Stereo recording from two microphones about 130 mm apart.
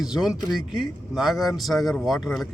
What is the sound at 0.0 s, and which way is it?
A man's voice, 5° right (ahead or behind).